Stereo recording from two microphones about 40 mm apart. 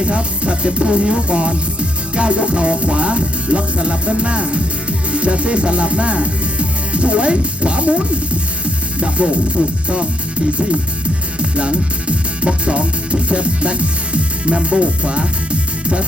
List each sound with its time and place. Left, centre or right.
0.0 s music: right
5.1 s speech: right
9.0 s music: right
11.3 s music: right